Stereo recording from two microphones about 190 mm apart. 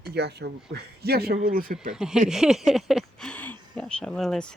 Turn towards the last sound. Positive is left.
turn(degrees=5)  # may be behind; listen again after turning